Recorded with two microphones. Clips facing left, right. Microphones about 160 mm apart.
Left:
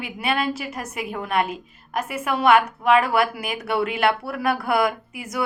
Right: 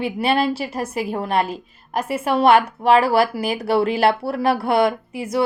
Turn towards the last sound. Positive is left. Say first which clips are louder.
# right 7 dB
turn(degrees=-30)  # may be behind; listen again after turning